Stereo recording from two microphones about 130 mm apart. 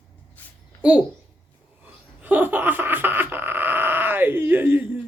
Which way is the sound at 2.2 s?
15° right (ahead or behind).